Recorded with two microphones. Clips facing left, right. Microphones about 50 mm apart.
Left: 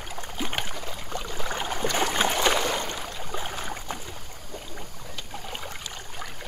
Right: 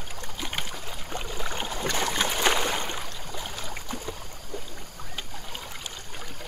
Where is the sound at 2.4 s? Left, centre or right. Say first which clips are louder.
Left 1 dB; centre.